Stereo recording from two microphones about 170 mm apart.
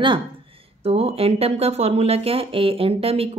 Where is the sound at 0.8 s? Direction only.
35° right (ahead or behind).